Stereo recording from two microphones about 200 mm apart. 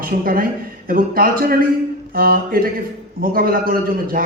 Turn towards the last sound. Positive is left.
turn(degrees=-45)  # may be behind; listen again after turning